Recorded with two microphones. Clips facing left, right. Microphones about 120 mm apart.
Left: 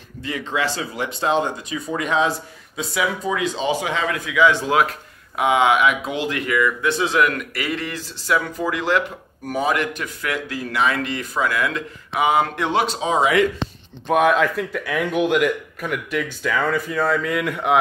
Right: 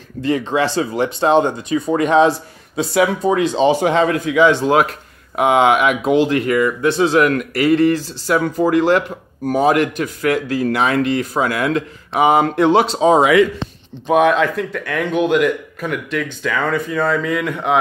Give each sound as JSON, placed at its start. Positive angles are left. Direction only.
{"t": 0.2, "sound": "a sound", "side_deg": -70}
{"t": 0.5, "sound": "speech", "side_deg": -30}
{"t": 2.8, "sound": "speech", "side_deg": -60}
{"t": 3.6, "sound": "speech", "side_deg": -35}
{"t": 5.3, "sound": "speech", "side_deg": -50}
{"t": 6.1, "sound": "speech", "side_deg": -35}
{"t": 14.0, "sound": "speech", "side_deg": 0}